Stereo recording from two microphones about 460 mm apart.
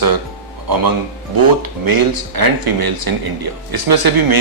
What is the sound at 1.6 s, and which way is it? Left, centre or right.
Speech, right.